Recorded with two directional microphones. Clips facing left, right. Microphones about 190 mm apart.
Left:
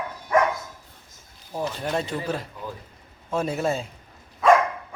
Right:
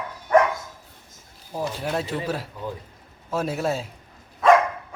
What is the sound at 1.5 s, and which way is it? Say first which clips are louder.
Speech: even; 5° right (ahead or behind).